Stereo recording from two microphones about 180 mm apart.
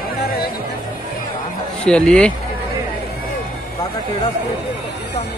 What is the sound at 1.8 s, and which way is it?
Speech, 5° left (ahead or behind).